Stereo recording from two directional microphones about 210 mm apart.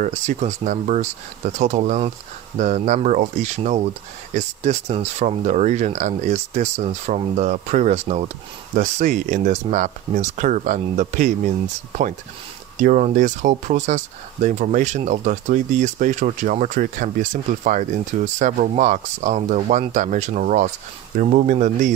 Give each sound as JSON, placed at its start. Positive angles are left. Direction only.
{"t": 0.0, "sound": "speech", "side_deg": -35}
{"t": 12.8, "sound": "speech", "side_deg": -40}